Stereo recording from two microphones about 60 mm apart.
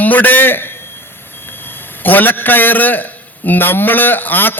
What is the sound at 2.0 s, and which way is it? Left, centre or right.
A man's voice, left.